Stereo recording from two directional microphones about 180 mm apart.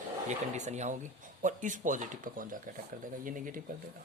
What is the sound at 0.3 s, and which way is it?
Speech, 40° right (ahead or behind).